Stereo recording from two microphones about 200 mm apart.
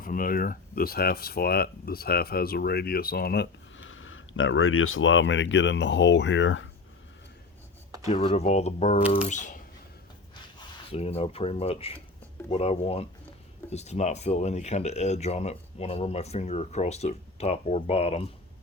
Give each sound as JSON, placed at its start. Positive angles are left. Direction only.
{"t": 0.0, "sound": "speech", "side_deg": 45}
{"t": 8.0, "sound": "speech", "side_deg": 30}
{"t": 10.9, "sound": "speech", "side_deg": 30}